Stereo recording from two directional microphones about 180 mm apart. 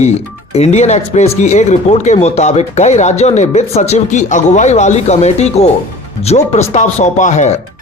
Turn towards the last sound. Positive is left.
turn(degrees=40)  # may be behind; listen again after turning